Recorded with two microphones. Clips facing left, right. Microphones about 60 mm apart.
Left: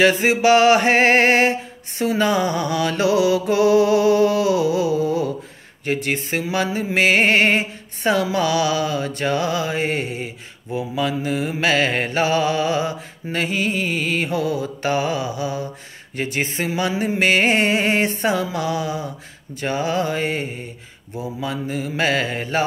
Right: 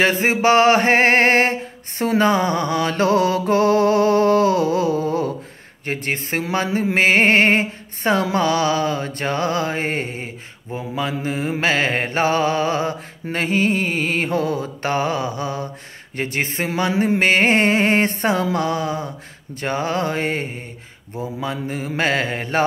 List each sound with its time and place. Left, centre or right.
0.0 s music: right